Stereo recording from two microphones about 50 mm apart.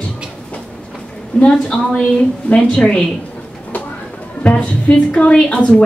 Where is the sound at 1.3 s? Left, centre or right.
Left.